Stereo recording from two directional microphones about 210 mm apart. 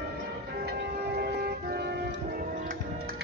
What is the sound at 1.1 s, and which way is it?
Music, 50° right (ahead or behind).